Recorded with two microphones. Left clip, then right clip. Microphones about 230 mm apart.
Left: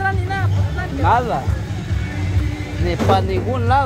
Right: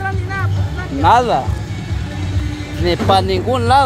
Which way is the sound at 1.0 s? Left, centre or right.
Right.